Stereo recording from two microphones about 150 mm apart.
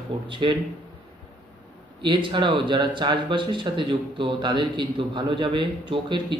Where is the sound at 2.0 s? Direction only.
30° right (ahead or behind).